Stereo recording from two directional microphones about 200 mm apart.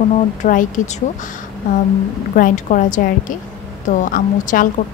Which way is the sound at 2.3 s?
40° left (ahead or behind).